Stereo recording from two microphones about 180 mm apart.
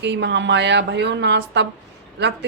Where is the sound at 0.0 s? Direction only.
75° right (ahead or behind).